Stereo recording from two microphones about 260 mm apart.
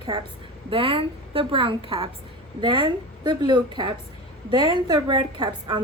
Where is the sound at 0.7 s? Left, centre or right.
Right.